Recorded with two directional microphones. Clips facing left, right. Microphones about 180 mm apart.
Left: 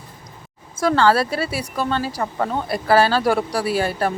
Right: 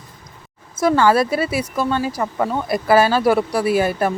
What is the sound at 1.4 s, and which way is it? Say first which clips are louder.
Speech: right 4 dB; 35° left (ahead or behind).